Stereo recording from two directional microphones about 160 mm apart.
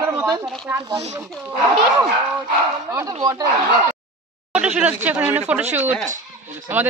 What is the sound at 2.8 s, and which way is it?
Speech, 20° right (ahead or behind).